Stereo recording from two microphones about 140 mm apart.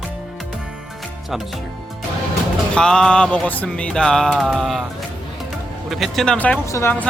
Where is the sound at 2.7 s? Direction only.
5° left (ahead or behind).